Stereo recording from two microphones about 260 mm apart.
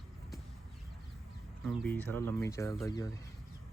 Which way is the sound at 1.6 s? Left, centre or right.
Centre.